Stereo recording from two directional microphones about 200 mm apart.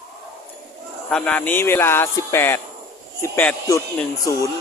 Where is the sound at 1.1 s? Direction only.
5° left (ahead or behind).